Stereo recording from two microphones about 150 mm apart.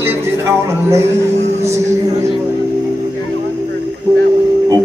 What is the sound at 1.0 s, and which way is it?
Speech, 45° right (ahead or behind).